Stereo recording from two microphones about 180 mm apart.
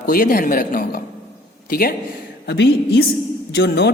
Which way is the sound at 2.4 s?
75° left (ahead or behind).